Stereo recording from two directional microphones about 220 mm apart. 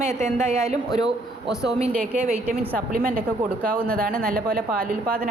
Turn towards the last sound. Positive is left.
turn(degrees=-40)  # may be behind; listen again after turning